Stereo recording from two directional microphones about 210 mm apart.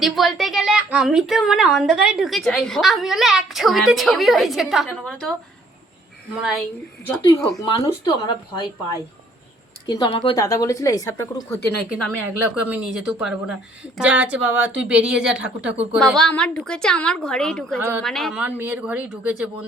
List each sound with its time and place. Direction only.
0.0 s a woman's voice: centre (ahead or behind)
6.4 s a woman's voice: centre (ahead or behind)
7.7 s a woman's voice: 15° left (ahead or behind)
11.9 s a woman's voice: centre (ahead or behind)
17.7 s speech: 10° right (ahead or behind)
18.0 s a woman's voice: centre (ahead or behind)